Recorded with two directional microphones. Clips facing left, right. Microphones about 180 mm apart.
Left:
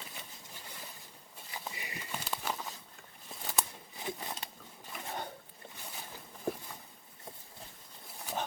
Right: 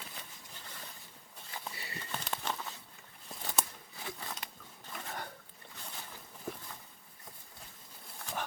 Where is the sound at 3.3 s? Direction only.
5° left (ahead or behind).